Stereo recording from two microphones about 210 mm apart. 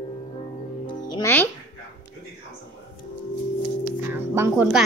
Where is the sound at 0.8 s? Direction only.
20° left (ahead or behind).